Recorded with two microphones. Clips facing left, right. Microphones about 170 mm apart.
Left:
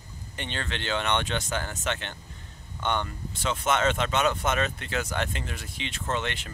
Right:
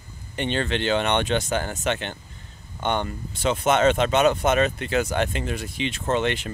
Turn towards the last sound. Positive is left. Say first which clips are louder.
# right 7 dB
turn(degrees=-20)  # may be behind; listen again after turning